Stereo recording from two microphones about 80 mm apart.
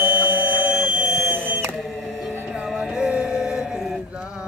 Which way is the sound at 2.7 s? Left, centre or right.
Centre.